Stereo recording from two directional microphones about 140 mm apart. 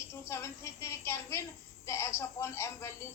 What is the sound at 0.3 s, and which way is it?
A woman's voice, 20° left (ahead or behind).